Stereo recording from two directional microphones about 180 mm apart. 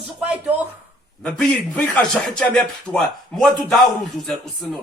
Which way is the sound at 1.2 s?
5° left (ahead or behind).